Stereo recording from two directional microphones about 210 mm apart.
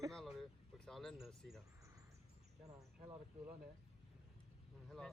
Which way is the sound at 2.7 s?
15° right (ahead or behind).